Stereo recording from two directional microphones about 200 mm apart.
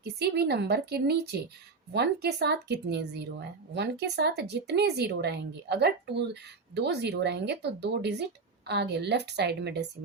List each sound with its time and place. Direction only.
0.0 s speech: 55° right (ahead or behind)